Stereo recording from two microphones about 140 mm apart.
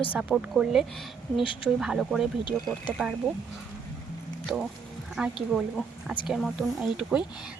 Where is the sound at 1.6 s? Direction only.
5° right (ahead or behind).